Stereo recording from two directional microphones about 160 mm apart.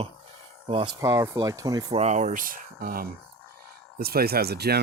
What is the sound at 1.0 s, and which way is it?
Speech, 20° right (ahead or behind).